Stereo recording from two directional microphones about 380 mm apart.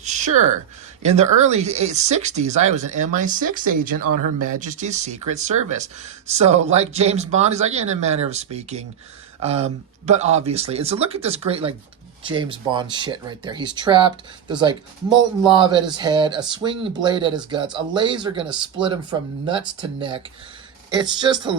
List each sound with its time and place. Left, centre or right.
0.0 s a sound: centre
1.0 s speech: centre
4.1 s speech: right
4.6 s speech: centre